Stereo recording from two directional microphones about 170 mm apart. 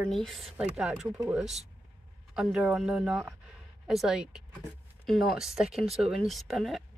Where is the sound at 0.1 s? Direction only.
Centre (ahead or behind).